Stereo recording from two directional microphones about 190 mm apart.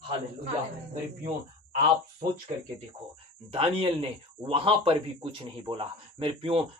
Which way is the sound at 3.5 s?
30° right (ahead or behind).